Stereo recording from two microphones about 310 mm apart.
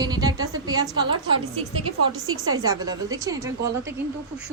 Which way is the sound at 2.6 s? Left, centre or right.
Centre.